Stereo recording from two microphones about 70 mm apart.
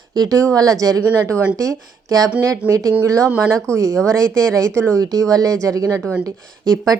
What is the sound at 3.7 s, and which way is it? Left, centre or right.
Speech, right.